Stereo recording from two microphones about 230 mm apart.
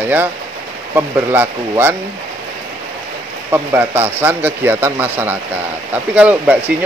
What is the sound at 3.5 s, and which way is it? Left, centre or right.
Speech, centre.